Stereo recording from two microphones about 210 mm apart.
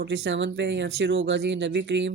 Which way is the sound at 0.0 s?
55° right (ahead or behind).